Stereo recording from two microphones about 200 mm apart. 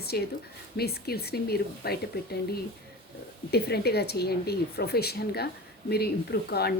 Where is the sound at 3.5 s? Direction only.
55° left (ahead or behind).